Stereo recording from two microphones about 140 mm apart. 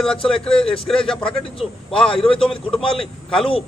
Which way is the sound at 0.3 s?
5° left (ahead or behind).